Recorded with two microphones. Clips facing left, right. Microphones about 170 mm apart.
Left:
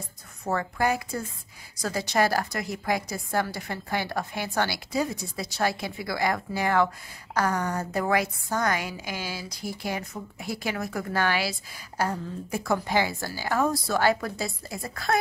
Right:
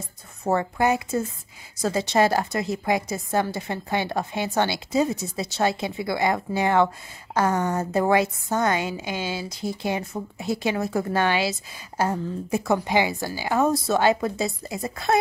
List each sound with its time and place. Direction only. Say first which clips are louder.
0.4 s a woman's voice: right 4 dB; 25° right (ahead or behind)